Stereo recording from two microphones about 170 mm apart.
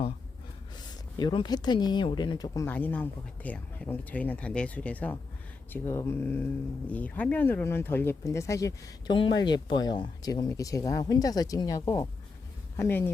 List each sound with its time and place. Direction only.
1.2 s speech: 25° left (ahead or behind)
2.6 s speech: 10° left (ahead or behind)